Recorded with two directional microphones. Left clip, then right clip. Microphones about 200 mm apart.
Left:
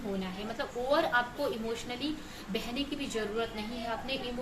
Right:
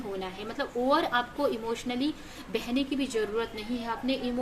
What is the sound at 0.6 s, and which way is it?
Speech, 55° right (ahead or behind).